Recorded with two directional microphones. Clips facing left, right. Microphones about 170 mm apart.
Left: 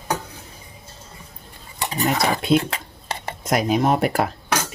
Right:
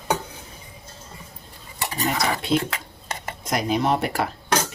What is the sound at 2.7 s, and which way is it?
Dishes, 30° left (ahead or behind).